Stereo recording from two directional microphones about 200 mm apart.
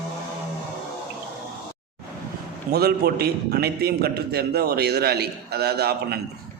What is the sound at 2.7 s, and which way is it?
A man's voice, 55° right (ahead or behind).